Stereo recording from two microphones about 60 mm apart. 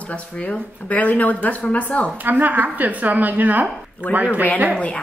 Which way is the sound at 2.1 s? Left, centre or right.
Right.